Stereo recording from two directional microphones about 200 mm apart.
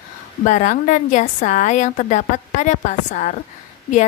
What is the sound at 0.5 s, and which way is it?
A woman's voice, 40° left (ahead or behind).